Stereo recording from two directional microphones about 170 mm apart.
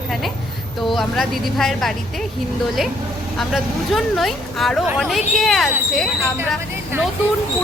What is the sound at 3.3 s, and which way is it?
Speech, centre (ahead or behind).